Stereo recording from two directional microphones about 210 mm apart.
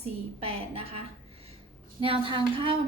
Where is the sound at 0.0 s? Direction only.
30° right (ahead or behind).